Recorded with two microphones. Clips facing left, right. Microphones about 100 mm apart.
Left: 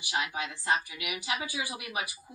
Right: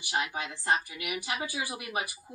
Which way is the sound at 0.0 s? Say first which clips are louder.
Right 1 dB; 40° right (ahead or behind).